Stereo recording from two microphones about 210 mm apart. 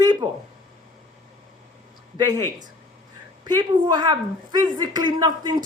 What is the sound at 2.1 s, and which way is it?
A woman's voice, 20° right (ahead or behind).